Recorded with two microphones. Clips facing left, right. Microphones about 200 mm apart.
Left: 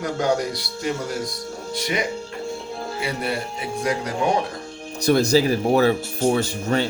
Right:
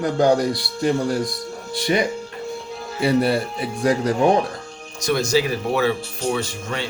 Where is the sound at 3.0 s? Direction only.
35° right (ahead or behind).